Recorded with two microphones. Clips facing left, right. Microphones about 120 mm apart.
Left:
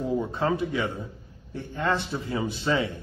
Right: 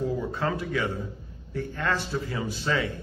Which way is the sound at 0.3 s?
25° left (ahead or behind).